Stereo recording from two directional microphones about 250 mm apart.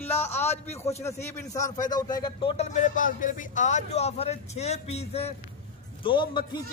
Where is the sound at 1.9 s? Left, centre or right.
Centre.